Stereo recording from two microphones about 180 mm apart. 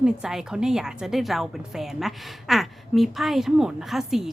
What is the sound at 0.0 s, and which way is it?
A woman's voice, 5° right (ahead or behind).